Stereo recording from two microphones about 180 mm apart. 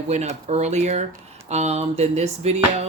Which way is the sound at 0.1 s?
40° right (ahead or behind).